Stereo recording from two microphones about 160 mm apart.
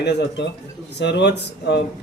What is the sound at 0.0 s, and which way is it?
A man's voice, 90° left.